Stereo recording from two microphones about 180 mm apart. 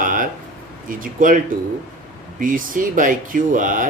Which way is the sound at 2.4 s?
50° right (ahead or behind).